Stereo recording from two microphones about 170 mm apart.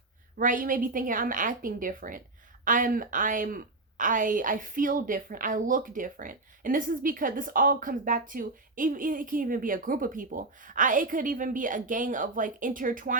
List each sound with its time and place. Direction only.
0.3 s a woman's voice: 55° right (ahead or behind)